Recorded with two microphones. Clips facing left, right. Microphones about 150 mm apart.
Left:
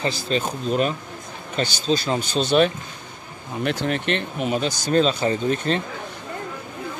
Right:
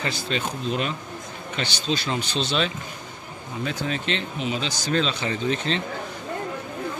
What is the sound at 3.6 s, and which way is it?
Speech, 70° left (ahead or behind).